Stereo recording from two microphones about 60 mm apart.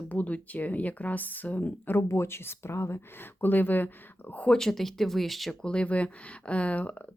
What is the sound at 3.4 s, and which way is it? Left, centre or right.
Speech, left.